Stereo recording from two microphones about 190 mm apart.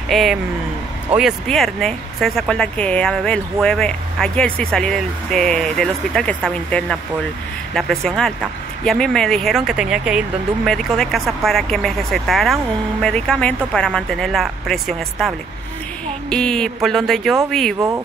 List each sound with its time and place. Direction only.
0.1 s speech: centre (ahead or behind)
17.7 s speech: 15° right (ahead or behind)